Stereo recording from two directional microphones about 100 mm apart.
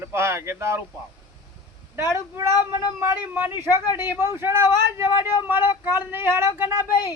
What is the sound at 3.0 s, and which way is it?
Speech, 20° right (ahead or behind).